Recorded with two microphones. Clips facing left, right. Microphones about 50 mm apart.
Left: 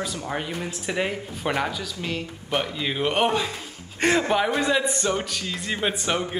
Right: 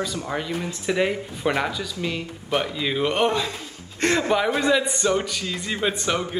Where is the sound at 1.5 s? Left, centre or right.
Centre.